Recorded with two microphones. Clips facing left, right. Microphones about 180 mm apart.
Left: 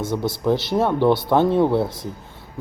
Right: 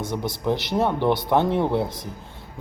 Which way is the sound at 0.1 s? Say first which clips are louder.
Left 4 dB; 15° right (ahead or behind).